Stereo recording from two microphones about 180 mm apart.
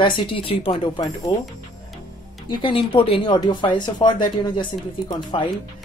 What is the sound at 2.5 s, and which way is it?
A woman's voice, 30° left (ahead or behind).